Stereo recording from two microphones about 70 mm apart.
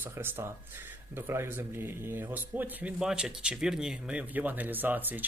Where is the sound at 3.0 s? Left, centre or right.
Centre; by 5.2 s right.